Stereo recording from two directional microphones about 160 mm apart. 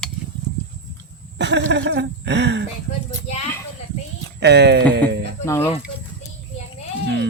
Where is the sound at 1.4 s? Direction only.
90° right.